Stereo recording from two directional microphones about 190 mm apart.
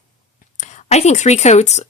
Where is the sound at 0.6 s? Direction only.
40° left (ahead or behind).